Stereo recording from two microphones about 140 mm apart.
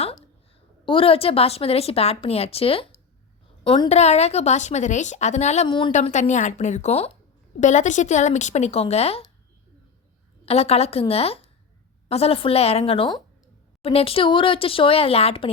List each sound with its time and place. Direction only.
0.9 s a woman's voice: 40° left (ahead or behind)
5.6 s speech: 35° left (ahead or behind)
5.9 s speech: 55° left (ahead or behind)
7.6 s speech: 60° left (ahead or behind)
10.4 s a woman's voice: 45° left (ahead or behind)